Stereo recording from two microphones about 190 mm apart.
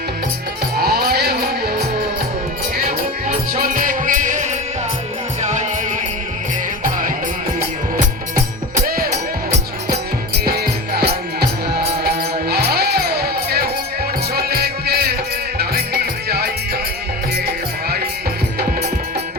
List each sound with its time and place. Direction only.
0.8 s music: 55° right (ahead or behind)
3.2 s music: 45° right (ahead or behind)
8.9 s music: 45° right (ahead or behind)